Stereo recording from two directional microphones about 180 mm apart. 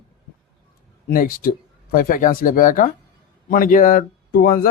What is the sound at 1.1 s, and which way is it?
Speech, 55° left (ahead or behind).